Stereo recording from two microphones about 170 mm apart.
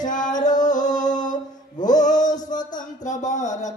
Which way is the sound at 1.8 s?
50° left (ahead or behind).